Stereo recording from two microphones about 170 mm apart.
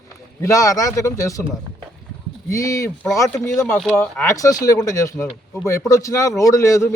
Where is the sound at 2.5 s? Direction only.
20° left (ahead or behind).